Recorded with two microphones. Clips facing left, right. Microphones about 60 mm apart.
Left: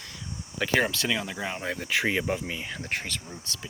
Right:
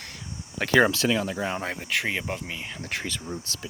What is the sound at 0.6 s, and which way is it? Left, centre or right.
Speech, right.